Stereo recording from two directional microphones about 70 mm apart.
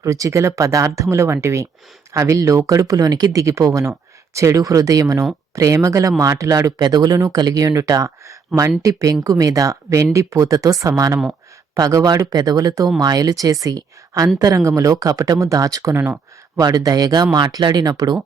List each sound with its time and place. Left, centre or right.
0.0 s speech: right
16.6 s speech: right
17.3 s speech: right